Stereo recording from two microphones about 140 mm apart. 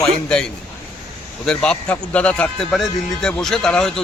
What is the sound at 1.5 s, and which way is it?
Speech, 10° left (ahead or behind).